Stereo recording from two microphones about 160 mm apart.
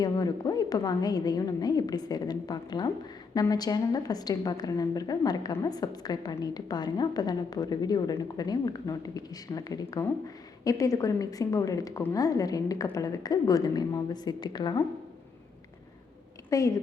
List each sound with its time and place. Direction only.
0.0 s a woman's voice: 25° left (ahead or behind)
16.5 s a woman's voice: 20° left (ahead or behind)